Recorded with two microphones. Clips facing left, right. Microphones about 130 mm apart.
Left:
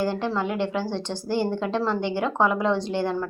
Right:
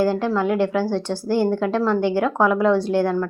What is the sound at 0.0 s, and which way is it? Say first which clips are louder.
Speech: right 6 dB; 10° right (ahead or behind).